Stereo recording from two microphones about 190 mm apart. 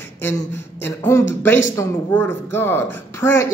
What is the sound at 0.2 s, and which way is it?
A woman's voice, 15° left (ahead or behind).